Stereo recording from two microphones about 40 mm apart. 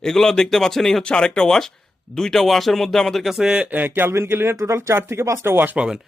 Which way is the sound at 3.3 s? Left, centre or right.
Centre.